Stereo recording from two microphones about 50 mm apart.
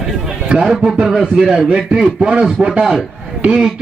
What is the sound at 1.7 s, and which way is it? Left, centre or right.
A man's voice, centre.